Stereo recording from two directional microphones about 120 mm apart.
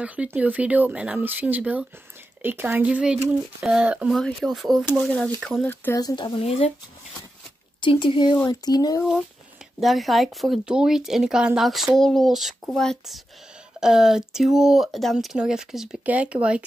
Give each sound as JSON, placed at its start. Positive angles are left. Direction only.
{"t": 0.0, "sound": "speech", "side_deg": -10}
{"t": 4.1, "sound": "speech", "side_deg": 0}
{"t": 5.9, "sound": "speech", "side_deg": 35}
{"t": 6.4, "sound": "speech", "side_deg": 60}
{"t": 7.8, "sound": "speech", "side_deg": 45}
{"t": 9.8, "sound": "speech", "side_deg": 0}